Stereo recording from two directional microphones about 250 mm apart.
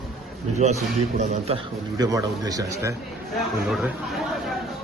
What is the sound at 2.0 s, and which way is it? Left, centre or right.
Speech, centre.